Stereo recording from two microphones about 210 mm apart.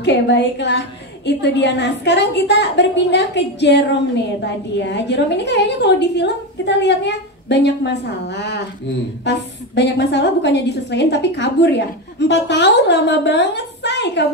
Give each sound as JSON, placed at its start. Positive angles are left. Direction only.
{"t": 0.0, "sound": "a woman's voice", "side_deg": 55}